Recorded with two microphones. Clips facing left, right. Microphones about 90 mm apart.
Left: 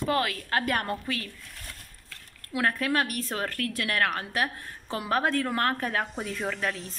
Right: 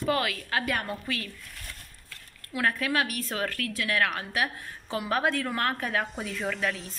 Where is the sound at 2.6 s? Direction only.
35° left (ahead or behind).